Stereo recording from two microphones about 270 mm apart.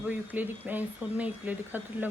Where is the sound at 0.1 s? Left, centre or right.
Centre.